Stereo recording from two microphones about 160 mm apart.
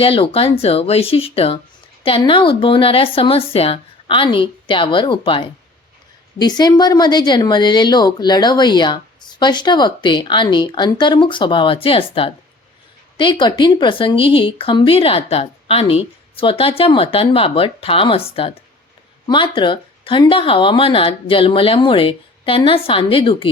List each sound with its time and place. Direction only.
0.0 s speech: 35° left (ahead or behind)